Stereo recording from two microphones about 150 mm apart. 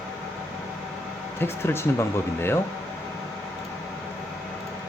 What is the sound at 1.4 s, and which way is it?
Speech, 15° left (ahead or behind).